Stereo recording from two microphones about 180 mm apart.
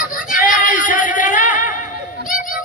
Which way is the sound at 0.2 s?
50° left (ahead or behind).